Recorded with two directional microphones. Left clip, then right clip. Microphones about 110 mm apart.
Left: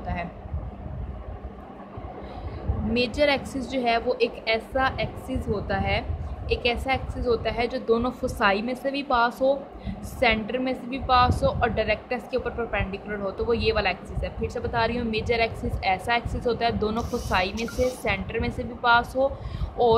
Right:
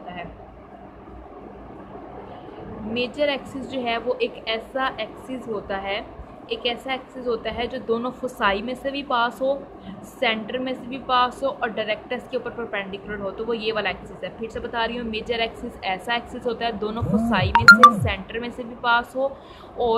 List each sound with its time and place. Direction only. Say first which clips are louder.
2.9 s a woman's voice: left 1 dB; 50° left (ahead or behind)
3.7 s a woman's voice: left 1 dB; 30° left (ahead or behind)